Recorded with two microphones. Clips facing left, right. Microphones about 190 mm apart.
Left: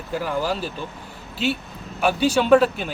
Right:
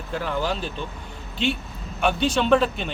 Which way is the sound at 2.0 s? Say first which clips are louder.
Left 2 dB; 5° left (ahead or behind).